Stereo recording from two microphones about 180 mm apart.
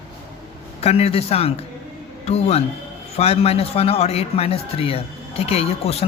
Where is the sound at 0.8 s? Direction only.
35° left (ahead or behind).